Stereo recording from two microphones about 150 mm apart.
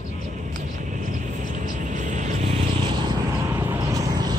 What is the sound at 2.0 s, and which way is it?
Vehicle, 55° right (ahead or behind).